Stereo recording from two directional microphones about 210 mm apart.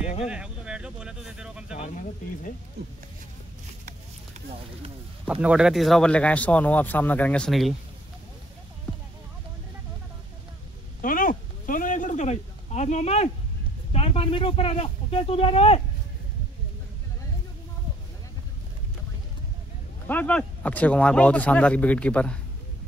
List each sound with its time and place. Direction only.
0.2 s speech: 5° right (ahead or behind)
2.8 s speech: 50° right (ahead or behind)
5.2 s speech: 5° right (ahead or behind)
11.0 s speech: 40° left (ahead or behind)
20.1 s speech: 5° left (ahead or behind)